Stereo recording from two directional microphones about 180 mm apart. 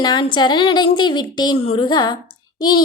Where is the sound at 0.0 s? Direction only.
25° left (ahead or behind).